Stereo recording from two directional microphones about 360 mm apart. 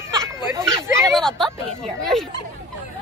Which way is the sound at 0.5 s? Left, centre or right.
Centre.